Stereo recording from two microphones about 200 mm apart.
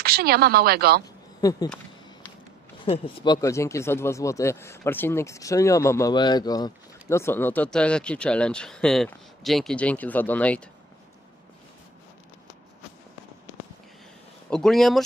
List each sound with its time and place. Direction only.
0.0 s a woman's voice: 50° right (ahead or behind)
1.4 s speech: 20° left (ahead or behind)
2.8 s speech: 25° left (ahead or behind); by 10.6 s 5° left (ahead or behind)
14.5 s speech: centre (ahead or behind)